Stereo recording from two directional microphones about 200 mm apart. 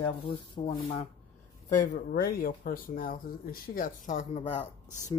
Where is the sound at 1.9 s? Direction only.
50° left (ahead or behind); by 4.6 s 35° left (ahead or behind).